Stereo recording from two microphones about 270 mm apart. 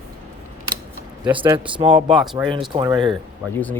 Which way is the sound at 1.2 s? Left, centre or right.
Centre.